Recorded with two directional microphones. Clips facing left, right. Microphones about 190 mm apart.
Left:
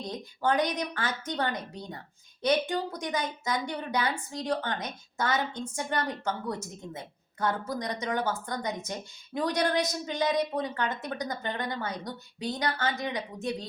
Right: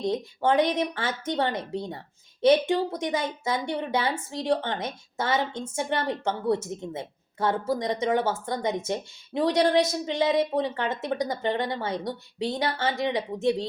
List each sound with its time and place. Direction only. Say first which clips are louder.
0.0 s a woman's voice: right 5 dB; 25° right (ahead or behind)